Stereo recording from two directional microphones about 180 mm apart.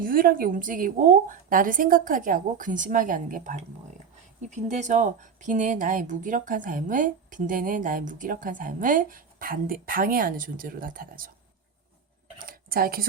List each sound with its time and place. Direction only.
0.0 s speech: 50° right (ahead or behind)
12.5 s speech: 55° right (ahead or behind)